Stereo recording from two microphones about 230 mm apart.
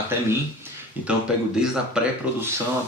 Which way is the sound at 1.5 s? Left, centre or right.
Centre.